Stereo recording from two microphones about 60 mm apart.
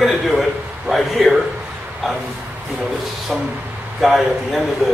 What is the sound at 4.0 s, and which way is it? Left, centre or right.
Speech, centre.